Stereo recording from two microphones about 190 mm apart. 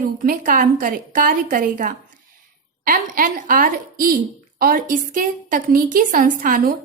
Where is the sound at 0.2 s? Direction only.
45° right (ahead or behind).